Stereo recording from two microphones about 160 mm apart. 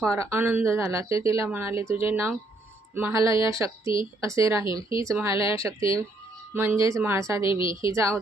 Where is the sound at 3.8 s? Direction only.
30° left (ahead or behind).